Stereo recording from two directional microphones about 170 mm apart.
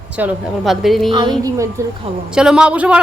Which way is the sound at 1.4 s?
20° right (ahead or behind).